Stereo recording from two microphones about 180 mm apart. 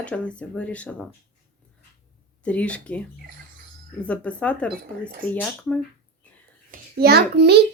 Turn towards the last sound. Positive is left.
turn(degrees=-65)  # may be behind; listen again after turning